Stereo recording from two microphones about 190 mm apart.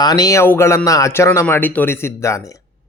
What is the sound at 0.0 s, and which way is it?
A man's voice, 20° left (ahead or behind).